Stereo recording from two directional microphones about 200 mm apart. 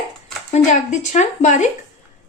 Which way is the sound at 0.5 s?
35° left (ahead or behind).